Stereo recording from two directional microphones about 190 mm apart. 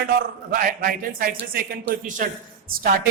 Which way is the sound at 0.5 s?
50° right (ahead or behind).